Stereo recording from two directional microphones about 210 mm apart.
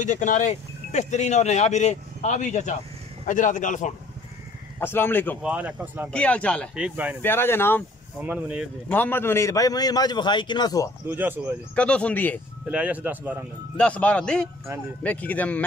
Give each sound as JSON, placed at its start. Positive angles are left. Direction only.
{"t": 0.0, "sound": "speech", "side_deg": 35}
{"t": 4.7, "sound": "a man's voice", "side_deg": 10}
{"t": 5.4, "sound": "a man's voice", "side_deg": -5}
{"t": 6.1, "sound": "speech", "side_deg": 5}
{"t": 7.2, "sound": "a man's voice", "side_deg": 10}
{"t": 8.2, "sound": "a man's voice", "side_deg": -10}
{"t": 8.9, "sound": "a man's voice", "side_deg": 10}
{"t": 11.1, "sound": "a man's voice", "side_deg": -10}
{"t": 11.7, "sound": "speech", "side_deg": 5}
{"t": 12.6, "sound": "a man's voice", "side_deg": -5}
{"t": 13.7, "sound": "a man's voice", "side_deg": 5}